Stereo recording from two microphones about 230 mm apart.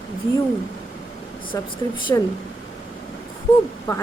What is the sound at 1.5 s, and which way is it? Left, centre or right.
Speech, centre.